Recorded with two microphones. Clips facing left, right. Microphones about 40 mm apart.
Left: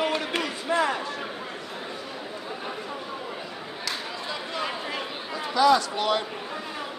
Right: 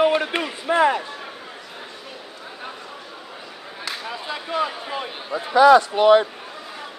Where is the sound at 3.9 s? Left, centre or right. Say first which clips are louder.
Right 3 dB; right.